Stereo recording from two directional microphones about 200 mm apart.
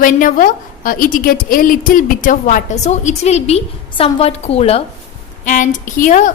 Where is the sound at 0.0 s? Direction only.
40° left (ahead or behind).